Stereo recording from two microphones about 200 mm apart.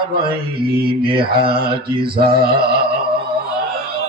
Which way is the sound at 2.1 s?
50° right (ahead or behind).